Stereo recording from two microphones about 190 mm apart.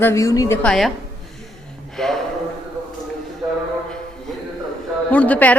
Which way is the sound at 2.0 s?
Centre (ahead or behind).